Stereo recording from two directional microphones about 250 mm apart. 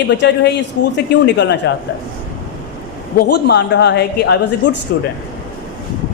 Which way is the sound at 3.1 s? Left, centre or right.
Left.